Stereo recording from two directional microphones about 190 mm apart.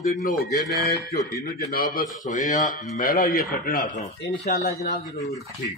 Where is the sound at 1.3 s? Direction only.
50° left (ahead or behind).